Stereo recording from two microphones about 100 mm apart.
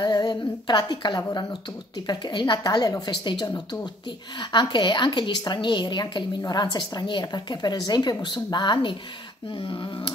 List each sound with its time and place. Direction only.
0.0 s speech: 45° left (ahead or behind)
9.6 s speech: 60° left (ahead or behind)